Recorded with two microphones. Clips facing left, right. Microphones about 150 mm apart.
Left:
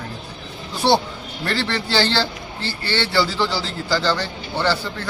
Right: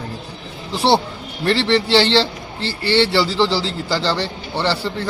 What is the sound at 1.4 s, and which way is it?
A man's voice, 30° right (ahead or behind).